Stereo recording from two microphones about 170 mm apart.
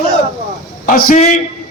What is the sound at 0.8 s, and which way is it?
Speech, 55° left (ahead or behind).